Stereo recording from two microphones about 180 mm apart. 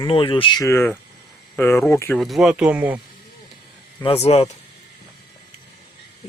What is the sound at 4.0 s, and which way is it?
Speech, 35° left (ahead or behind).